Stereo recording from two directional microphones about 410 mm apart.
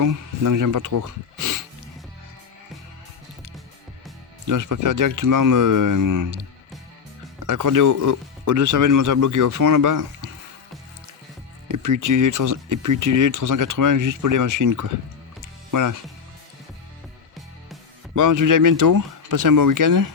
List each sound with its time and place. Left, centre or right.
0.0 s speech: right
4.4 s speech: right
7.4 s speech: right
11.7 s speech: right
18.1 s speech: right